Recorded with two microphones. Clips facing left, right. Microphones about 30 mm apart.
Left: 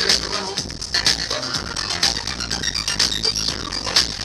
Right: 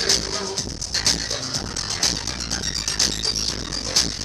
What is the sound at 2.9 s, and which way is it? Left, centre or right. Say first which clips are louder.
Music: left 3 dB; left.